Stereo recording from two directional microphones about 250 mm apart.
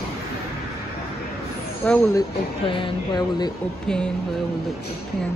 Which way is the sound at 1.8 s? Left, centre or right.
Centre.